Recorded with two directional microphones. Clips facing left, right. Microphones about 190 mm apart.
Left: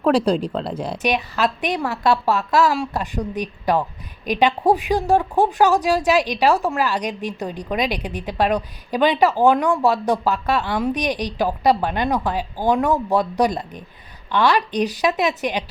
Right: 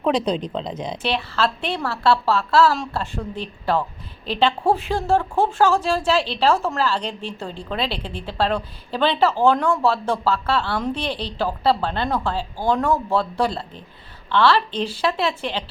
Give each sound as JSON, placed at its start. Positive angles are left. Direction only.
{"t": 0.1, "sound": "a woman's voice", "side_deg": 10}